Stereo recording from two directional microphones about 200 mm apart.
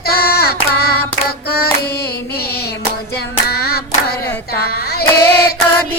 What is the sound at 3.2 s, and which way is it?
Child singing, 55° left (ahead or behind).